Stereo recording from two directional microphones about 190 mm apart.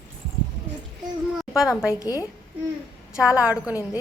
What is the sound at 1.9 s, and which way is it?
Speech, 20° left (ahead or behind).